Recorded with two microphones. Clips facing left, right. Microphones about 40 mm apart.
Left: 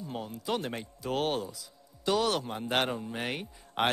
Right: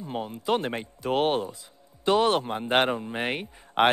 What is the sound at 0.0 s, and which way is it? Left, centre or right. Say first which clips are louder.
Speech: right 6 dB; right.